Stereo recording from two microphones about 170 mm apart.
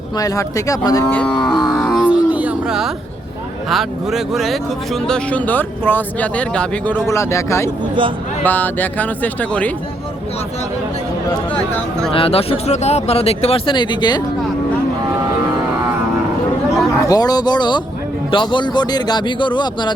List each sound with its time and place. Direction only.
0.2 s a man's voice: 20° left (ahead or behind)
1.1 s cattle: 10° left (ahead or behind)
2.0 s music: 10° right (ahead or behind)
3.7 s speech: centre (ahead or behind)
12.1 s speech: 35° left (ahead or behind)
16.9 s a man's voice: 20° left (ahead or behind)